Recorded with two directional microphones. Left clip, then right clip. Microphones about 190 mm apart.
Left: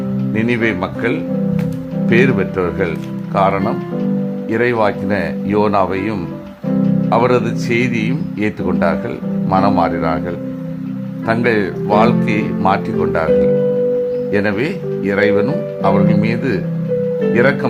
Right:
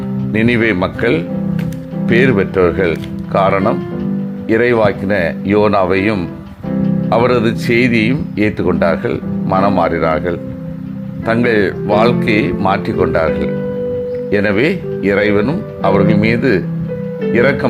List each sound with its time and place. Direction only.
0.3 s speech: 20° right (ahead or behind)